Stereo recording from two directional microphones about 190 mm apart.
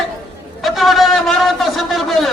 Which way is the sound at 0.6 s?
Centre (ahead or behind).